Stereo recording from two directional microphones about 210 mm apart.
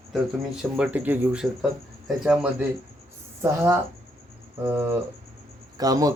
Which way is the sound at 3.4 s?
10° right (ahead or behind).